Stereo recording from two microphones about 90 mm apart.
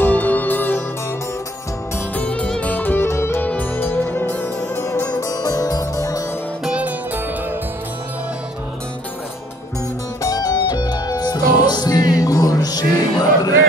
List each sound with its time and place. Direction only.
0.0 s music: 20° left (ahead or behind)
2.1 s music: 15° left (ahead or behind)
4.7 s music: 35° left (ahead or behind)
5.1 s music: 45° left (ahead or behind)
10.2 s music: 45° left (ahead or behind)